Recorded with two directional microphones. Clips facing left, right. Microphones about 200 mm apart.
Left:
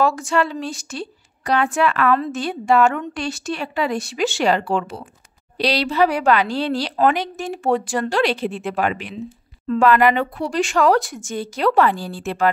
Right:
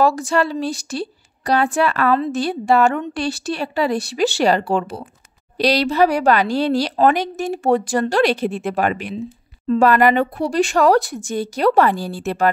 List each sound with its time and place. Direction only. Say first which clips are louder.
0.0 s a woman's voice: right 2 dB; 35° right (ahead or behind)